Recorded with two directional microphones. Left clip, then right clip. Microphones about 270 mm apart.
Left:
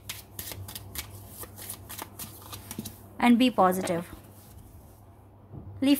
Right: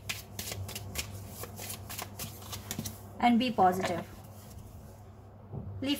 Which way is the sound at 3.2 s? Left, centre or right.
Left.